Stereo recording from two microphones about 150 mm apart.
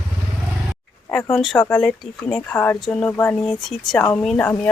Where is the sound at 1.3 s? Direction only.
Centre (ahead or behind).